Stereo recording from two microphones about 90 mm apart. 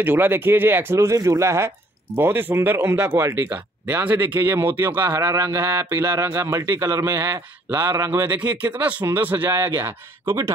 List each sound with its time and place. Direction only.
0.0 s a man's voice: 20° right (ahead or behind)
3.4 s a man's voice: 15° right (ahead or behind)